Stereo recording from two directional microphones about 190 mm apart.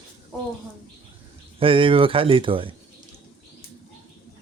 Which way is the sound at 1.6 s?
30° right (ahead or behind).